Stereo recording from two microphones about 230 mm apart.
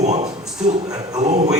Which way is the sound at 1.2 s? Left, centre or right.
Right.